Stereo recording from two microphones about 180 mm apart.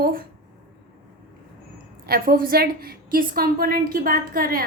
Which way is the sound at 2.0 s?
55° right (ahead or behind).